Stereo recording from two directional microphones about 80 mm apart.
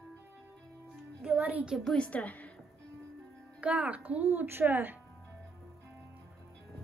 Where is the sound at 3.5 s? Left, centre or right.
Centre.